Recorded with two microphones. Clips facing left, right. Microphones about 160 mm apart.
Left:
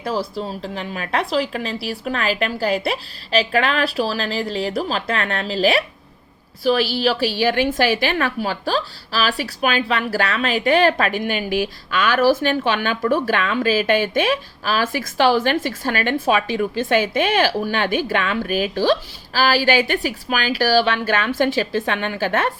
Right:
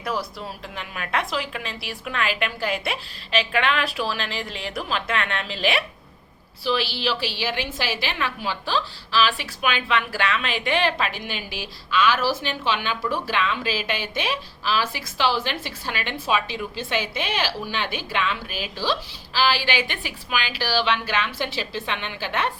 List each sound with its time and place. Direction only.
0.0 s a woman's voice: 30° left (ahead or behind); by 22.5 s 45° left (ahead or behind)